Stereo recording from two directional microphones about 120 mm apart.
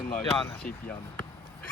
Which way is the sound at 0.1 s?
5° left (ahead or behind).